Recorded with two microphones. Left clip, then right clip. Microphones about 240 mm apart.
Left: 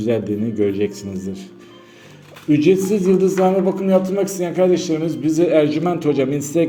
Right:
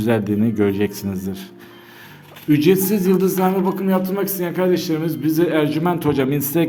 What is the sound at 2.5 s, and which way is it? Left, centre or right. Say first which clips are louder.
A man's voice: left 1 dB; right.